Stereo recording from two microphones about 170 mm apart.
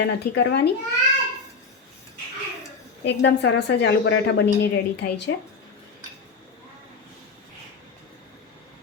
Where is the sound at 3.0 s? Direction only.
85° left.